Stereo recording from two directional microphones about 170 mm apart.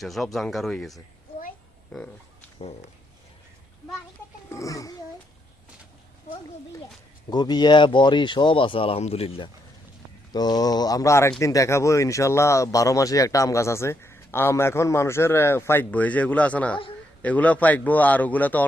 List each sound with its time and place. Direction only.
0.0 s speech: centre (ahead or behind)
4.4 s a child's voice: 20° left (ahead or behind)
7.3 s speech: 25° left (ahead or behind)
10.3 s speech: 25° left (ahead or behind)